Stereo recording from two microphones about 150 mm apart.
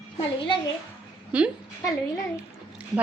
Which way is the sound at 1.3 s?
10° right (ahead or behind).